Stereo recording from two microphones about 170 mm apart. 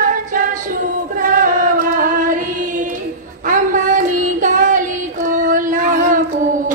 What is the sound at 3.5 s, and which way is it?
Child singing, 50° right (ahead or behind).